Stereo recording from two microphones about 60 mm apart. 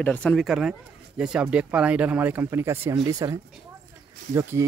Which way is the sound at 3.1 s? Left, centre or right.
Right.